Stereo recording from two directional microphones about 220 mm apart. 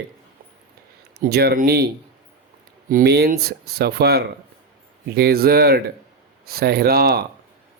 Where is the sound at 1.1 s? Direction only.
45° right (ahead or behind).